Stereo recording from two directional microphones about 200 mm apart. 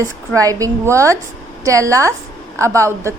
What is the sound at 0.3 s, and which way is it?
A woman's voice, 15° right (ahead or behind).